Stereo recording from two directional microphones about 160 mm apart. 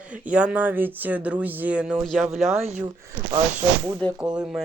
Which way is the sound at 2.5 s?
40° right (ahead or behind).